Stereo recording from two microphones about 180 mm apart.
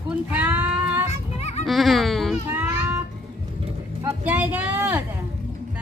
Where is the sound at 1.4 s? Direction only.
35° left (ahead or behind).